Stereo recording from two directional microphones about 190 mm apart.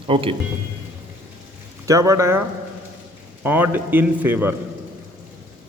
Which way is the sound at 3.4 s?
10° right (ahead or behind).